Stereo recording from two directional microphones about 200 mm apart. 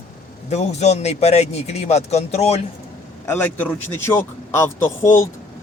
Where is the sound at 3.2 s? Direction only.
10° left (ahead or behind).